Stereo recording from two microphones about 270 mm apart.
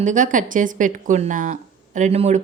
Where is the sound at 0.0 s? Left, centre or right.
Right.